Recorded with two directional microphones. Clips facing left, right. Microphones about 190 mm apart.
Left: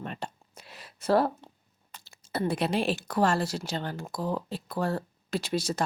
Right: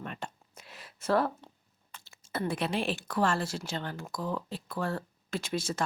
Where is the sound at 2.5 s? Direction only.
40° left (ahead or behind).